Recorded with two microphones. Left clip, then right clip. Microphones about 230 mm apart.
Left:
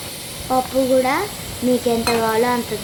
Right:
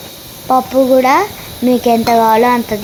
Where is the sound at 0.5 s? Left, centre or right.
Right.